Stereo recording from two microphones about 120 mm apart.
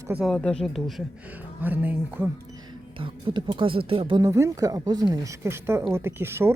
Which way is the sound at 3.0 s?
45° right (ahead or behind).